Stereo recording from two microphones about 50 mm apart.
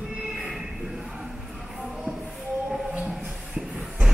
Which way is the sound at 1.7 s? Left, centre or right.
Centre.